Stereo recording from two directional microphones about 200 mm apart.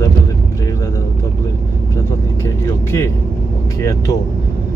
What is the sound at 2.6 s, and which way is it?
Speech, 15° left (ahead or behind).